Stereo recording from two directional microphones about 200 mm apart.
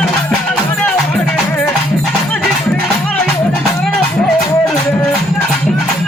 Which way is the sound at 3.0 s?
5° left (ahead or behind).